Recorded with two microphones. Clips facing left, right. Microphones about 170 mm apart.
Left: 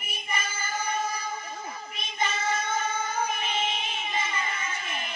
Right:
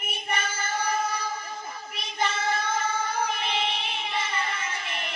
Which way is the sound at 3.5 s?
70° right (ahead or behind).